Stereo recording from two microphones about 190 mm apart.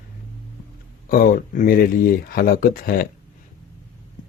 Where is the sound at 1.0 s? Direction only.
50° left (ahead or behind).